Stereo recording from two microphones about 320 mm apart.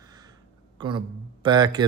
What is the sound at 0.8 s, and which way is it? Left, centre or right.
Speech, centre.